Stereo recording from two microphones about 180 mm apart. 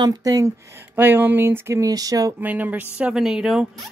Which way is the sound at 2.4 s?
10° right (ahead or behind).